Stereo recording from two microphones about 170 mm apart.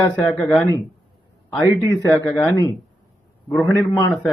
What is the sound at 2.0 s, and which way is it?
Speech, 15° left (ahead or behind).